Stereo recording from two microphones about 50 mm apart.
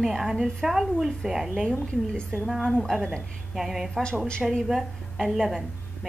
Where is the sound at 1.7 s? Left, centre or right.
Centre.